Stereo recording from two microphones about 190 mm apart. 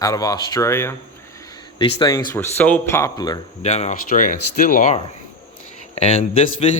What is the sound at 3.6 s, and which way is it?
Speech, 35° left (ahead or behind).